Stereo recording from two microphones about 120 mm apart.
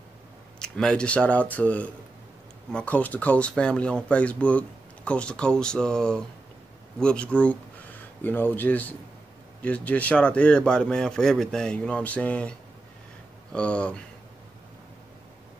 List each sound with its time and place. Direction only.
0.6 s speech: 5° left (ahead or behind)